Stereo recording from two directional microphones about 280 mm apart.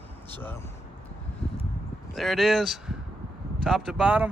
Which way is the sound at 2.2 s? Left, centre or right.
Centre.